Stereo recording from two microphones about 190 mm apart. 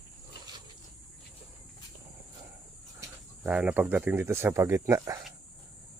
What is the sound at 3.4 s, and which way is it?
Speech, 5° right (ahead or behind).